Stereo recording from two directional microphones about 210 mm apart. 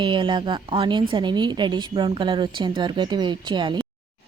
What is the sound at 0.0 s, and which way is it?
Speech, 25° right (ahead or behind).